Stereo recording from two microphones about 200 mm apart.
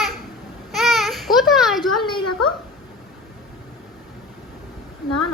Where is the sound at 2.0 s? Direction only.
25° left (ahead or behind).